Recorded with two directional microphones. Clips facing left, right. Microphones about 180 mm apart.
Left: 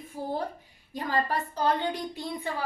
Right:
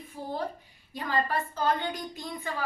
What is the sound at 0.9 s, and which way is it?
Speech, 40° left (ahead or behind).